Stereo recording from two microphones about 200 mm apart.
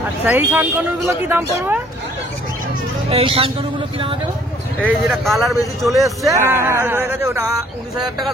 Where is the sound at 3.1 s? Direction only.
25° right (ahead or behind).